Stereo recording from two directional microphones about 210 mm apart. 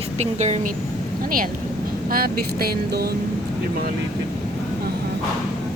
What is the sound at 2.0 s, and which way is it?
Speech, 45° right (ahead or behind).